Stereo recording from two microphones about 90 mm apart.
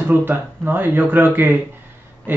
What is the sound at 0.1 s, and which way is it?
Speech, 20° right (ahead or behind).